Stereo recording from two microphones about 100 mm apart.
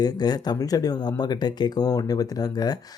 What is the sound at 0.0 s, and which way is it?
Speech, 40° left (ahead or behind).